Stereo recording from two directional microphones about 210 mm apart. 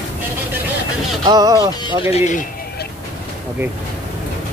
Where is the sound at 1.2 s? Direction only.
20° right (ahead or behind).